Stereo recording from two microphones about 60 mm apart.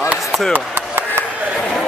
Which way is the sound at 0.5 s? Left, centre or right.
Right.